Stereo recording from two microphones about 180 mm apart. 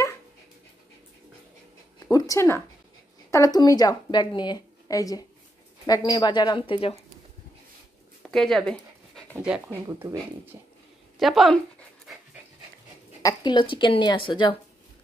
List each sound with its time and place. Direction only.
2.0 s a sound: 20° left (ahead or behind)
3.3 s a woman's voice: 20° left (ahead or behind)
8.2 s dog: centre (ahead or behind)
9.3 s speech: 10° right (ahead or behind)
11.1 s speech: centre (ahead or behind)
13.2 s a woman's voice: 20° left (ahead or behind)